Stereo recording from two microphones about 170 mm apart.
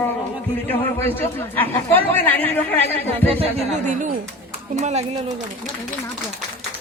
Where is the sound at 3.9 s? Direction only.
50° right (ahead or behind).